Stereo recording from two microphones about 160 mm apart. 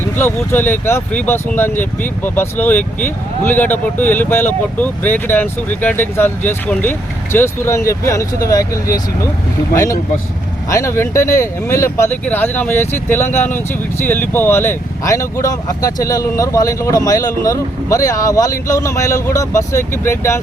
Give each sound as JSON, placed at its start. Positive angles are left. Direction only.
{"t": 0.2, "sound": "speech", "side_deg": 10}